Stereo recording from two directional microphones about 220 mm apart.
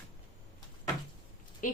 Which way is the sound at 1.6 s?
35° left (ahead or behind).